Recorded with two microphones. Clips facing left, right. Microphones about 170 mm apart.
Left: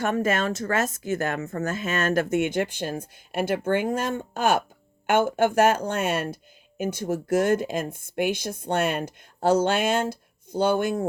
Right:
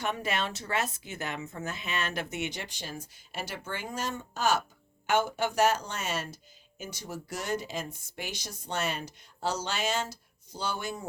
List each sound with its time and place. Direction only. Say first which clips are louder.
0.0 s speech: left 8 dB; 45° left (ahead or behind)